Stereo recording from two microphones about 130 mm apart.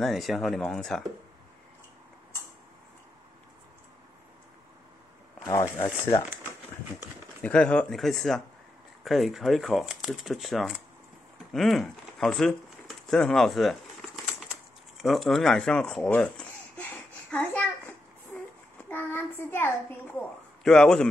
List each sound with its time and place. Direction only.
0.0 s speech: centre (ahead or behind)
5.4 s speech: 25° left (ahead or behind)
7.4 s speech: 10° left (ahead or behind)
11.5 s a sound: centre (ahead or behind)
17.3 s child singing: 10° left (ahead or behind)
18.9 s child singing: 15° left (ahead or behind)
20.2 s a man's voice: 5° left (ahead or behind)